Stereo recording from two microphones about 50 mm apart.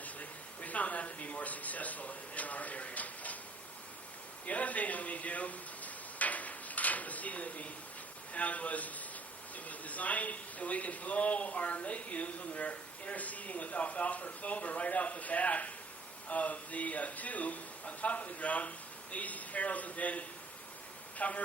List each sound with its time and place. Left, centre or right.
0.0 s speech: left
4.4 s a sound: left
8.3 s a man's voice: left